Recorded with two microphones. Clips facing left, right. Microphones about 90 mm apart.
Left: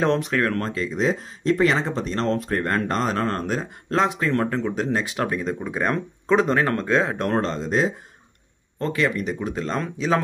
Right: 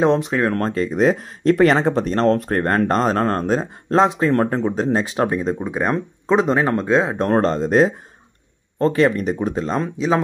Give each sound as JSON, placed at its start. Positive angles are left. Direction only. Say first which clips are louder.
{"t": 0.0, "sound": "speech", "louder": "right 4 dB", "side_deg": -20}
{"t": 0.6, "sound": "speech", "louder": "right 6 dB", "side_deg": -45}
{"t": 7.2, "sound": "speech", "louder": "right 6 dB", "side_deg": -35}
{"t": 8.7, "sound": "speech", "louder": "right 7 dB", "side_deg": -35}
{"t": 9.6, "sound": "speech", "louder": "right 4 dB", "side_deg": -20}